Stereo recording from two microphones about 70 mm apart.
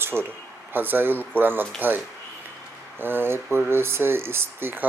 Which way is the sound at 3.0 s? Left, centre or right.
Right.